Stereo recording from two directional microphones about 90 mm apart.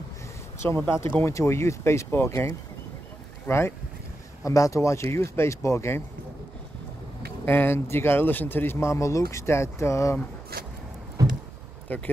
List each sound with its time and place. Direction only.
0.6 s speech: 25° left (ahead or behind)
7.4 s speech: 25° left (ahead or behind)
11.2 s a sound: 40° right (ahead or behind)
11.9 s speech: 20° left (ahead or behind)